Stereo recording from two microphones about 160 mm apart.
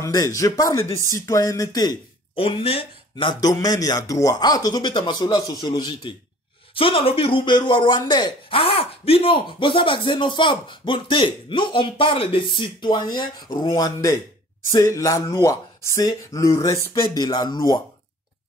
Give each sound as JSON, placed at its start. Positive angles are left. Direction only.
{"t": 0.0, "sound": "speech", "side_deg": 20}